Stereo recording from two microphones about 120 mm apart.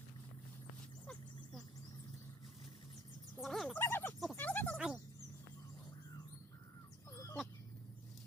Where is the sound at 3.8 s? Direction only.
20° left (ahead or behind).